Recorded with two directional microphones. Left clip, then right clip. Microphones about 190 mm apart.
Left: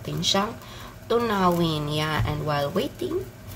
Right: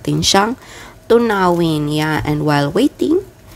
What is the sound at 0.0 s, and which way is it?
Speech, 45° right (ahead or behind).